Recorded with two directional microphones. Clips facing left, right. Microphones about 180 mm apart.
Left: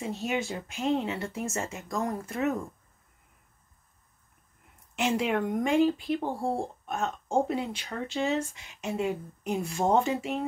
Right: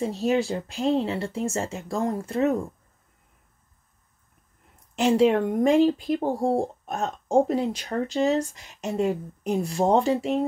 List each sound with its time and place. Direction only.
0.0 s speech: 35° right (ahead or behind)
4.9 s speech: 35° right (ahead or behind)